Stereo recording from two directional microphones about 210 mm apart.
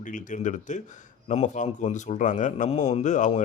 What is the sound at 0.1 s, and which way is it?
A man's voice, 35° left (ahead or behind).